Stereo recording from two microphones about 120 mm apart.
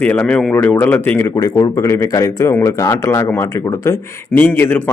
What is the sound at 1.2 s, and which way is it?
Speech, 30° left (ahead or behind).